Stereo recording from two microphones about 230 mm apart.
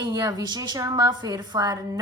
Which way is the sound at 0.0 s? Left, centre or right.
Centre.